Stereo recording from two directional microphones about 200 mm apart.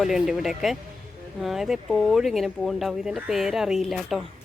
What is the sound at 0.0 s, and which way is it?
Speech, centre (ahead or behind).